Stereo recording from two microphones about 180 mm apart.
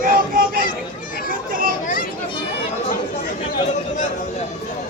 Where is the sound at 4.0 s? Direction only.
40° left (ahead or behind).